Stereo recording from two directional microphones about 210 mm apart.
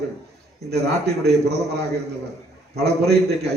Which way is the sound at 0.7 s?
50° right (ahead or behind).